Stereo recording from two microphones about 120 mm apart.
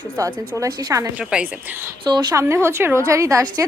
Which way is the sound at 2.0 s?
35° right (ahead or behind).